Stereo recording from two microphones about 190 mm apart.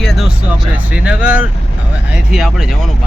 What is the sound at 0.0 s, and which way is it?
Speech, centre (ahead or behind).